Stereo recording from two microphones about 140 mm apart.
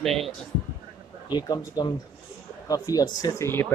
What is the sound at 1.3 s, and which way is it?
Speech, 30° left (ahead or behind).